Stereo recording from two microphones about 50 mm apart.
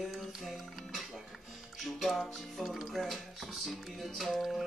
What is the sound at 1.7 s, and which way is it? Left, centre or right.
Speech, centre.